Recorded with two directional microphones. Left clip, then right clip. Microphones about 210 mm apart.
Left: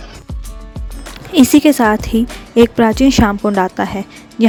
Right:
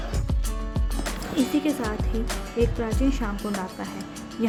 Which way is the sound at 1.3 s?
50° left (ahead or behind).